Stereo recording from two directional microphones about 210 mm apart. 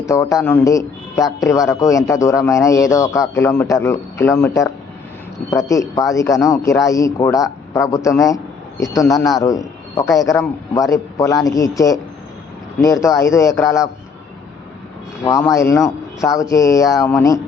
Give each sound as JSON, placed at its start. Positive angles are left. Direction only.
{"t": 0.0, "sound": "a man's voice", "side_deg": 15}
{"t": 15.2, "sound": "a man's voice", "side_deg": 15}